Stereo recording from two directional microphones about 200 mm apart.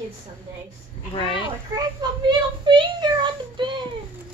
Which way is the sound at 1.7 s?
20° right (ahead or behind).